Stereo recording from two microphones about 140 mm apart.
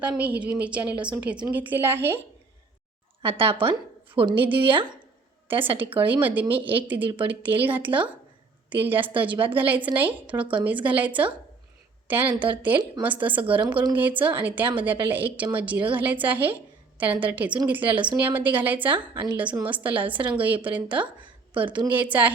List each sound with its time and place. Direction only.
0.0 s a woman's voice: 10° right (ahead or behind)
3.2 s a woman's voice: 40° right (ahead or behind)
4.4 s a woman's voice: 10° right (ahead or behind)